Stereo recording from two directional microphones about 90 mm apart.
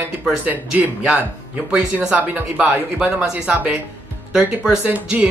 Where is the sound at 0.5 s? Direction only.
15° right (ahead or behind).